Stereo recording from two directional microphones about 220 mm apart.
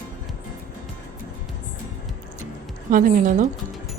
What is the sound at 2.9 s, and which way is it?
Speech, 35° right (ahead or behind).